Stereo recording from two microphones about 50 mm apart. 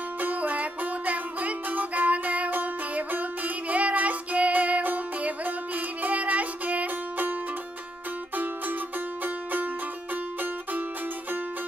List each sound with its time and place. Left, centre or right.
0.2 s music: right
9.2 s music: right